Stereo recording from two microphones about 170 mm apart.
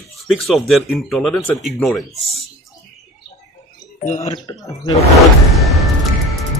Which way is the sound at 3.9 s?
45° left (ahead or behind).